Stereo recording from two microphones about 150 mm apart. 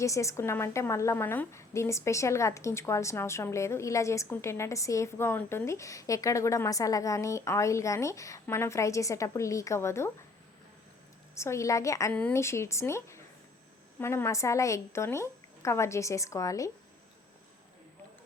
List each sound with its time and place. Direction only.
0.0 s a woman's voice: 20° left (ahead or behind)
11.3 s a woman's voice: 20° left (ahead or behind)